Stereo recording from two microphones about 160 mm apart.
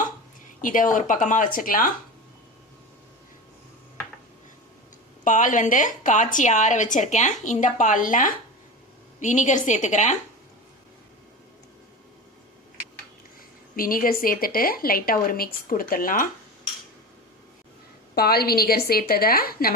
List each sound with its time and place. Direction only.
0.6 s a woman's voice: 55° left (ahead or behind)
5.2 s a woman's voice: 55° left (ahead or behind)
13.7 s a woman's voice: 60° left (ahead or behind)
18.1 s a woman's voice: 80° left